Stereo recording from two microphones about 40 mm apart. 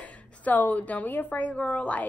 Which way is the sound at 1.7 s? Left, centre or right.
Left.